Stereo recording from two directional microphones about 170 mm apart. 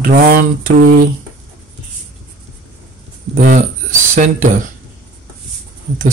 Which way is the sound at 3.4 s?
50° right (ahead or behind).